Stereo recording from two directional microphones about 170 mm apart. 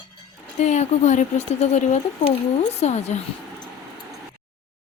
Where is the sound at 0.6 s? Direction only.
40° left (ahead or behind).